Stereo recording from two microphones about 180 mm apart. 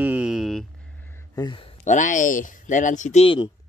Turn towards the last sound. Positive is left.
turn(degrees=35)  # may be behind; listen again after turning